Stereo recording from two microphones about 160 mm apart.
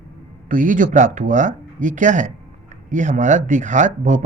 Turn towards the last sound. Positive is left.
turn(degrees=-50)  # may be behind; listen again after turning